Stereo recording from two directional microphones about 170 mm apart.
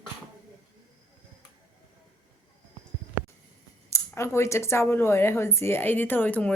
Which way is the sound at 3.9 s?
15° left (ahead or behind).